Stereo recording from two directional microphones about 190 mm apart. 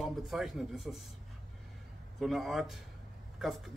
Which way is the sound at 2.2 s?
Centre (ahead or behind).